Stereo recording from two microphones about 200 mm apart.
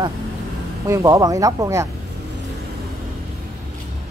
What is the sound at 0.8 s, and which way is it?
Speech, 15° right (ahead or behind).